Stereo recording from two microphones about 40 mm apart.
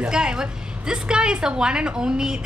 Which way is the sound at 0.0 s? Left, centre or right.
Right.